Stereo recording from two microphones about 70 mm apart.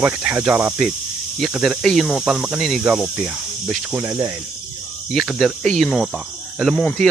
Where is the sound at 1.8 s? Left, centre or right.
Centre.